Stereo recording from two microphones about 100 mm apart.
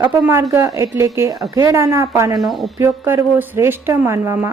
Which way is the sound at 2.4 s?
Centre (ahead or behind).